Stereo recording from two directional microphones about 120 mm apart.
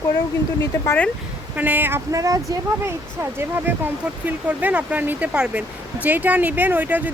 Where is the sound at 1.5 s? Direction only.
15° right (ahead or behind).